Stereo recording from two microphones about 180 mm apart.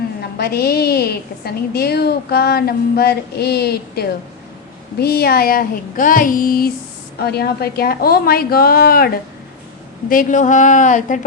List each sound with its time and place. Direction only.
0.2 s a woman's voice: 60° left (ahead or behind)
10.1 s speech: 45° left (ahead or behind)